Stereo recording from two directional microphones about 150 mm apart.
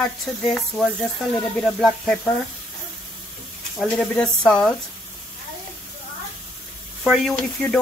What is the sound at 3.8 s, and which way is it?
Speech, 5° left (ahead or behind).